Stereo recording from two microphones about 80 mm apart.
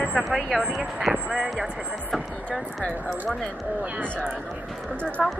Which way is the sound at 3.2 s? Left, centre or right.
Centre.